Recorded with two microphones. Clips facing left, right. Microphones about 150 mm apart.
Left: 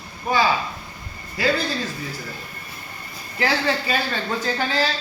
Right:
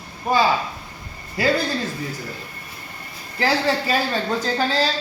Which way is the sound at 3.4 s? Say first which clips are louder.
Right 2 dB; 40° right (ahead or behind).